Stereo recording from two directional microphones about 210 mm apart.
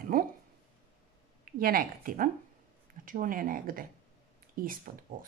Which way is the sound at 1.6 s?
45° right (ahead or behind).